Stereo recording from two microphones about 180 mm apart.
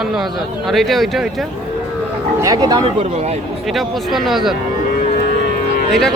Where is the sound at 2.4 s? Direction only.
20° right (ahead or behind).